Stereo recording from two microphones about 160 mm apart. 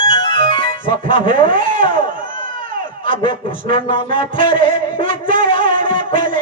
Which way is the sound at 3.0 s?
30° left (ahead or behind).